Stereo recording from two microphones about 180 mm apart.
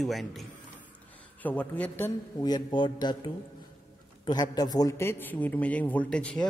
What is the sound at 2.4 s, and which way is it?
A man's voice, 25° left (ahead or behind).